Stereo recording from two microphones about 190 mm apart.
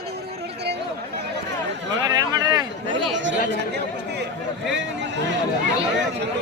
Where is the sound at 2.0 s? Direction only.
20° right (ahead or behind).